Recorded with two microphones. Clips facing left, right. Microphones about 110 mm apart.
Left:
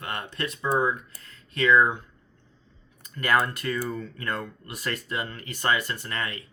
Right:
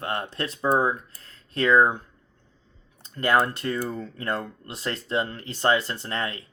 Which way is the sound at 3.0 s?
30° right (ahead or behind).